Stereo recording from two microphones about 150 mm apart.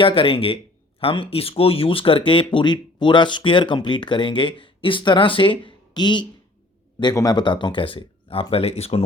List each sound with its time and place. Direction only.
0.0 s speech: 35° left (ahead or behind)